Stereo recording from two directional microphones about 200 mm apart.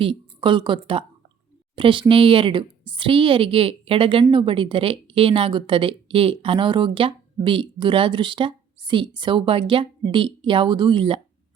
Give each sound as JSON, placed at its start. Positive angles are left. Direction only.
{"t": 0.0, "sound": "a woman's voice", "side_deg": -25}